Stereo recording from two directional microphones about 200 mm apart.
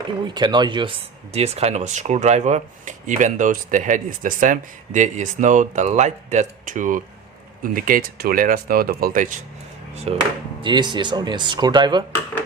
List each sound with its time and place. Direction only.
0.3 s speech: 20° right (ahead or behind); by 9.0 s 50° right (ahead or behind)
9.9 s speech: 30° right (ahead or behind)